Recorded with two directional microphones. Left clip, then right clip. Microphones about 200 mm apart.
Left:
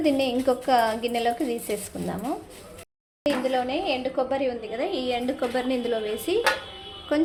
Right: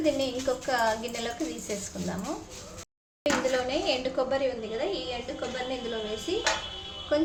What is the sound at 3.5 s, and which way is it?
Speech, 15° left (ahead or behind).